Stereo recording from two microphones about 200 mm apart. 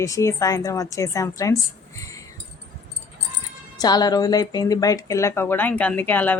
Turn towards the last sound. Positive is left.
turn(degrees=10)  # may be behind; listen again after turning